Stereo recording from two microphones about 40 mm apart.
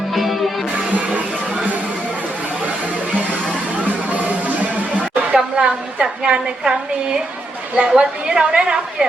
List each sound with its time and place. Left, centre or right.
0.1 s music: centre
3.8 s music: right
5.3 s a woman's voice: right